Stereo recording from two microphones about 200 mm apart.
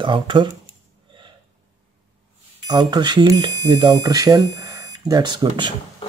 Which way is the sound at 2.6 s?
20° right (ahead or behind).